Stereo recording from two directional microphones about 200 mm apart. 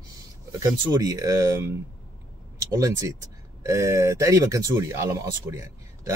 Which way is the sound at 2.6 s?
15° right (ahead or behind).